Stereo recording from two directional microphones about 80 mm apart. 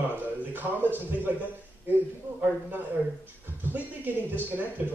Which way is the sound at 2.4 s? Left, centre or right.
Right.